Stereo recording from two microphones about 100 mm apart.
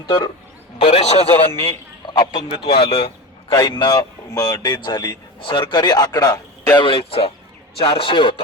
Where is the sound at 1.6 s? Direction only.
55° left (ahead or behind).